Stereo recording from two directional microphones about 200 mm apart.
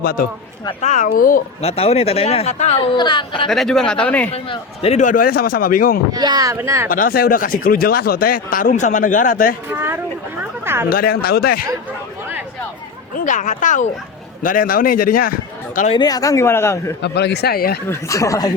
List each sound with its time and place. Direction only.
0.0 s speech: 45° left (ahead or behind)
1.6 s speech: 30° left (ahead or behind)
2.7 s a woman's voice: 20° left (ahead or behind)
3.5 s speech: centre (ahead or behind)
4.3 s speech: 30° left (ahead or behind); by 6.0 s 45° left (ahead or behind)
6.1 s speech: 20° right (ahead or behind)
6.8 s speech: 45° left (ahead or behind)
9.6 s speech: 10° right (ahead or behind)
10.8 s speech: 45° left (ahead or behind)
13.1 s a man's voice: 40° left (ahead or behind)
15.9 s speech: 20° left (ahead or behind)
17.0 s speech: 55° left (ahead or behind)
17.8 s speech: 15° left (ahead or behind)